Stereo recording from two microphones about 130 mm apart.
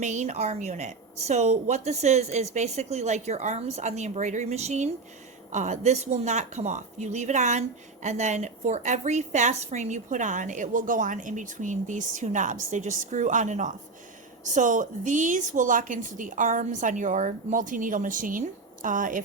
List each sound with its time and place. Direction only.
0.0 s a woman's voice: 65° right (ahead or behind); by 19.2 s 90° right